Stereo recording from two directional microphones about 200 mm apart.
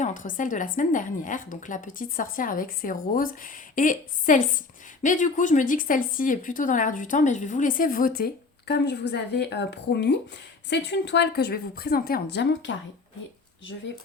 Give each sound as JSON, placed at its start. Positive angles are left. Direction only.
{"t": 0.0, "sound": "a woman's voice", "side_deg": 40}